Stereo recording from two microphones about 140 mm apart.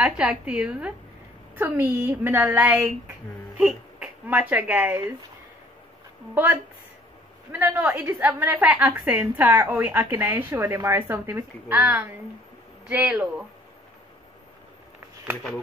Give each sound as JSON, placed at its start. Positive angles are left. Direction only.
{"t": 0.0, "sound": "a woman's voice", "side_deg": -5}
{"t": 6.3, "sound": "a woman's voice", "side_deg": -15}